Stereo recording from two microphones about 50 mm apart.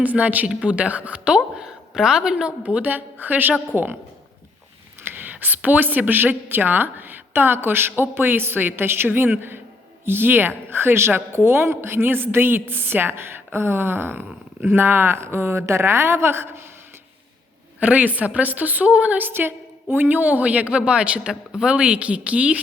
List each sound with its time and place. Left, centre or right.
0.0 s a woman's voice: right
5.0 s a woman's voice: right
17.7 s a woman's voice: right
19.3 s a woman's voice: right